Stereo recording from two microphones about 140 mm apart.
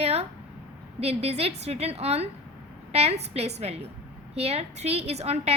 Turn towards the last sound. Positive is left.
turn(degrees=-45)  # may be behind; listen again after turning